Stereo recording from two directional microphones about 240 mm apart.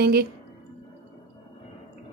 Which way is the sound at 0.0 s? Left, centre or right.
Right.